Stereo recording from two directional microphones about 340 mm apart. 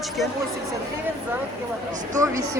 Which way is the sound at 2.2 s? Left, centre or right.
Centre.